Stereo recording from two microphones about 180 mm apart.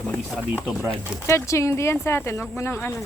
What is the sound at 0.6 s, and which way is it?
Speech, 5° right (ahead or behind).